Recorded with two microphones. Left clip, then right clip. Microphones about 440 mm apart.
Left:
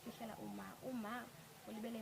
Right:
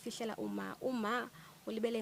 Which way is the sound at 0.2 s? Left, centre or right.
Right.